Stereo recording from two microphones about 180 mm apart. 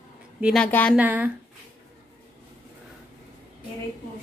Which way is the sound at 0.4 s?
Centre (ahead or behind).